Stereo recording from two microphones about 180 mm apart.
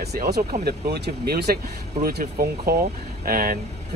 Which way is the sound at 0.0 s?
65° right (ahead or behind).